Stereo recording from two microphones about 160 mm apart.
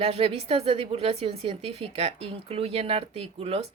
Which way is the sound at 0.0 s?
40° right (ahead or behind).